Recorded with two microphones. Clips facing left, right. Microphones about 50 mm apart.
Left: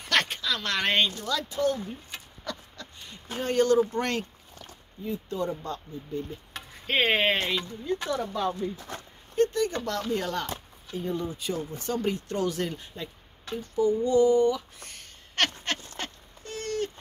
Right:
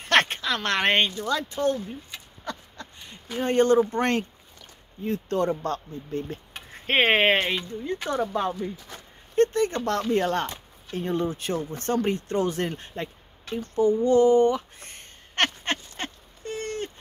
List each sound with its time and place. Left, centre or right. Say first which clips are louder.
0.0 s a woman's voice: right 5 dB; right
2.4 s a sound: right 3 dB; right
3.4 s speech: right 3 dB; right
5.0 s speech: right 6 dB; right
6.7 s speech: right 4 dB; right
10.9 s speech: right 4 dB; right
13.6 s a sound: right 3 dB; right